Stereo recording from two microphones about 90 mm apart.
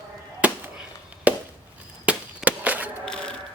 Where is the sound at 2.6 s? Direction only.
20° right (ahead or behind).